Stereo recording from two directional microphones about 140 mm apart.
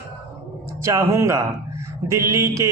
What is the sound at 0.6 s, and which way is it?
Speech, 20° right (ahead or behind).